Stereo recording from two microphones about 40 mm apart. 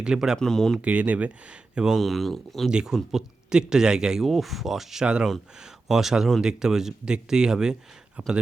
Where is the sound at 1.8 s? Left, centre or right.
Centre.